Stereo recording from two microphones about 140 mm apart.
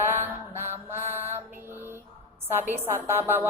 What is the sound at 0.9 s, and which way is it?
Mantra, 15° right (ahead or behind).